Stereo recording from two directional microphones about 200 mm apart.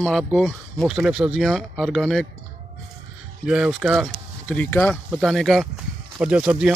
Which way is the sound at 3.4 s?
5° right (ahead or behind).